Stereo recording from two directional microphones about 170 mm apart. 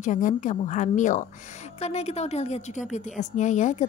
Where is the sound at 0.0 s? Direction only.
50° left (ahead or behind).